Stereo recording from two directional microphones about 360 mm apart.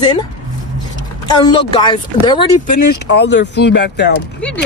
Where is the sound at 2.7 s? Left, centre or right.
Left.